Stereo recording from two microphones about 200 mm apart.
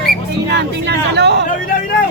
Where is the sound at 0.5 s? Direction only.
55° right (ahead or behind).